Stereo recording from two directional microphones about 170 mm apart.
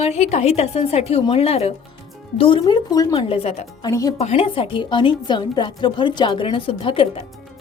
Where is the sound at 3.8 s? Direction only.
20° left (ahead or behind).